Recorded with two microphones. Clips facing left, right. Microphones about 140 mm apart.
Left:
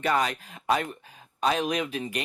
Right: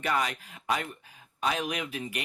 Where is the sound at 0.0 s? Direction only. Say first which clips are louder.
Left 4 dB; 30° left (ahead or behind).